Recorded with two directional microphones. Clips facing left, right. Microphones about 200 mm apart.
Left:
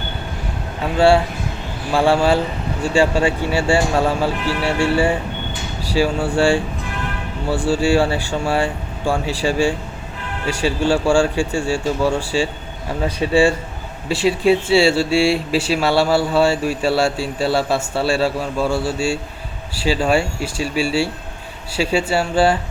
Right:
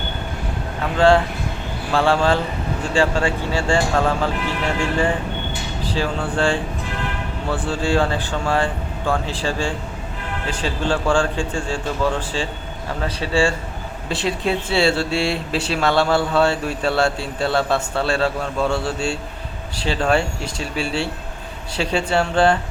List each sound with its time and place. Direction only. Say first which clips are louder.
0.9 s speech: left 1 dB; 10° left (ahead or behind)
5.8 s speech: left 5 dB; 10° left (ahead or behind)